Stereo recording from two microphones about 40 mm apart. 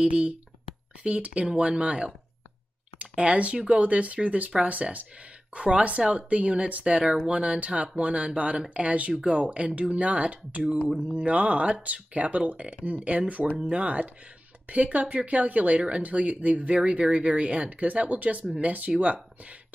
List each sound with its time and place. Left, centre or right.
0.0 s speech: right